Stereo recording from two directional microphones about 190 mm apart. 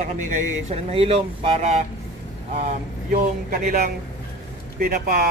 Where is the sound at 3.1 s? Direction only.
50° right (ahead or behind).